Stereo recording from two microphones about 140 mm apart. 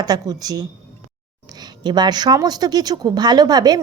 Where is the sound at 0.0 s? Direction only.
25° right (ahead or behind).